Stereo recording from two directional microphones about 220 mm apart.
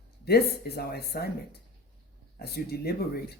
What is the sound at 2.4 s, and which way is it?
Speech, 45° left (ahead or behind).